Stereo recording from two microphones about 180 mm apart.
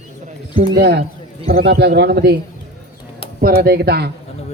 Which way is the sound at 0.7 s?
65° right (ahead or behind).